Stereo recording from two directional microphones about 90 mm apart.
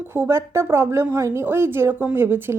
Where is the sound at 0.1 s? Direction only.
30° right (ahead or behind).